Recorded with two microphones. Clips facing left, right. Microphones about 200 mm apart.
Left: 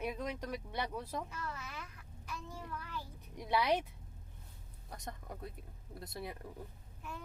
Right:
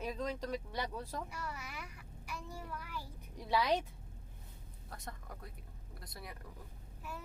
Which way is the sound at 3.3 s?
15° left (ahead or behind).